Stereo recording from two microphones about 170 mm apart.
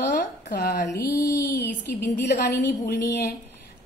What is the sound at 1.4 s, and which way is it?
Speech, 70° left (ahead or behind).